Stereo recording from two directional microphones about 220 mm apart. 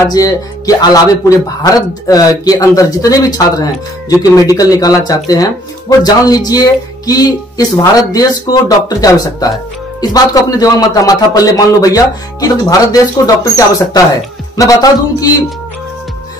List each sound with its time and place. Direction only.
0.0 s speech: 15° left (ahead or behind)
2.0 s speech: 15° left (ahead or behind)